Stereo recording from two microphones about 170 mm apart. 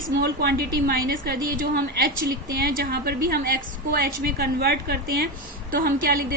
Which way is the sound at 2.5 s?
60° right (ahead or behind).